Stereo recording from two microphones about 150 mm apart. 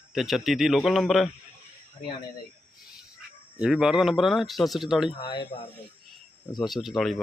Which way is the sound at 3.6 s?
5° right (ahead or behind).